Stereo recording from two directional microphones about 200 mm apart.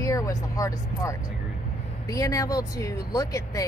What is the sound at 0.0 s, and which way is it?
Speech, 15° left (ahead or behind).